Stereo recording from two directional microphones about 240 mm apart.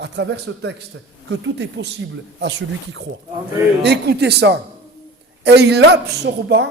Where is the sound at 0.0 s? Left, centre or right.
Right.